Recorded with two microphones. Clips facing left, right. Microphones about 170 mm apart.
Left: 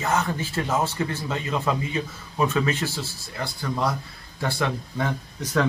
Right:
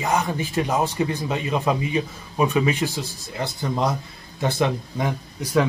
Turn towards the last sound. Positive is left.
turn(degrees=-10)  # may be behind; listen again after turning